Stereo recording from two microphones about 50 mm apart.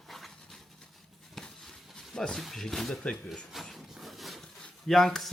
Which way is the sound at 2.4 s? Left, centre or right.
Centre.